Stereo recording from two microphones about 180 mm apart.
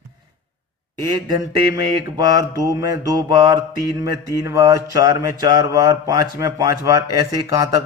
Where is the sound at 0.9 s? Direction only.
25° right (ahead or behind).